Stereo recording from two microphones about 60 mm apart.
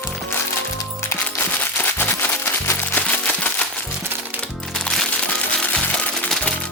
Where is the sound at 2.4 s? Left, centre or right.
Left.